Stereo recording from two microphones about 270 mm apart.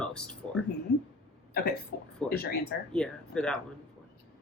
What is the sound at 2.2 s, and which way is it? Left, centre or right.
Speech, left.